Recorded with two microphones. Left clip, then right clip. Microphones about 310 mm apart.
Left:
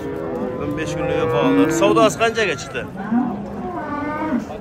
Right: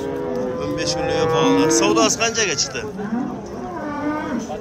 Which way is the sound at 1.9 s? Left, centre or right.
Centre.